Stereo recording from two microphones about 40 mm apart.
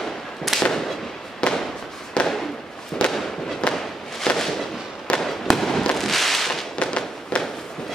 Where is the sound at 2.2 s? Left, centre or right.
Left.